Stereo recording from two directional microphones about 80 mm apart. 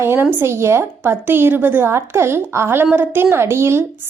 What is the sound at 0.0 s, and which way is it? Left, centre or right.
A woman's voice, right.